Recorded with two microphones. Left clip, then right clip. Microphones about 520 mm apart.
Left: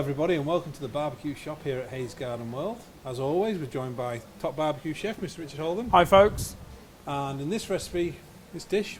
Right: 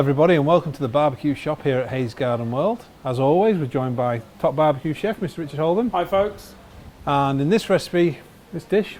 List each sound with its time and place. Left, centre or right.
0.0 s a man's voice: right
5.9 s speech: left
7.0 s a man's voice: right